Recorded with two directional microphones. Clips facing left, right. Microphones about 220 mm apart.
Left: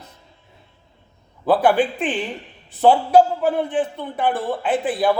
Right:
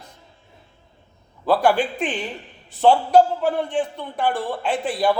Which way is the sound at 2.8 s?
5° left (ahead or behind).